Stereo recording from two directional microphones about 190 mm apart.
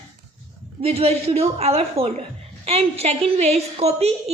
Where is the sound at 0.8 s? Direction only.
30° right (ahead or behind).